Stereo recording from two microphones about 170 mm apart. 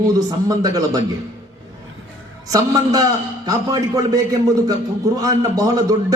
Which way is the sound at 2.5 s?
20° right (ahead or behind).